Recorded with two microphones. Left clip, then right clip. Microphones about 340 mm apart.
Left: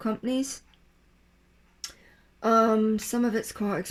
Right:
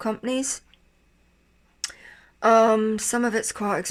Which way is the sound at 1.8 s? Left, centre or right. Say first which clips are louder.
Right 7 dB; right.